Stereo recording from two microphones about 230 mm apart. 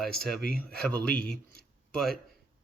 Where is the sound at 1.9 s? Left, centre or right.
Centre.